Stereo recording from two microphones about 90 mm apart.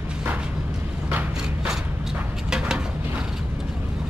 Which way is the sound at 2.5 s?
10° right (ahead or behind).